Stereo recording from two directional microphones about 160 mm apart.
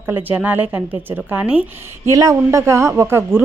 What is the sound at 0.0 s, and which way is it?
Speech, 10° right (ahead or behind).